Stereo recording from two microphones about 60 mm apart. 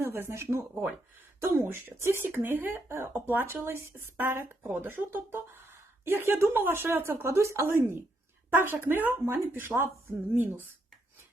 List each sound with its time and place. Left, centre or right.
0.0 s speech: right
7.3 s speech: right